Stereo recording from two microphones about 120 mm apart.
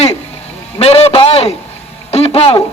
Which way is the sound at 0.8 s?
60° left (ahead or behind).